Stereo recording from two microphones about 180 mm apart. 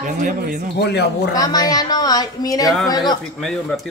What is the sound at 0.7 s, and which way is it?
Speech, 70° left (ahead or behind).